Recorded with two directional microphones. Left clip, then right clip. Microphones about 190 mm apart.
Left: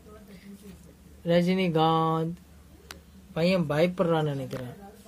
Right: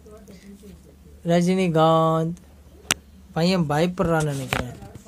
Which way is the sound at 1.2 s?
15° right (ahead or behind).